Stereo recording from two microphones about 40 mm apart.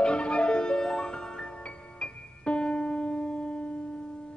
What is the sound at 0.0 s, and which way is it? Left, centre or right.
Music, left.